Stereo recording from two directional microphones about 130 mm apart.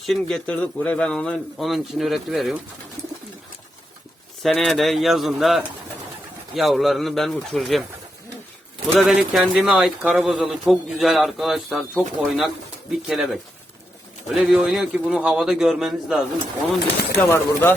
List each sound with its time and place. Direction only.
0.0 s speech: centre (ahead or behind)
4.4 s speech: centre (ahead or behind)
9.0 s speech: 5° right (ahead or behind)
17.2 s speech: 20° left (ahead or behind)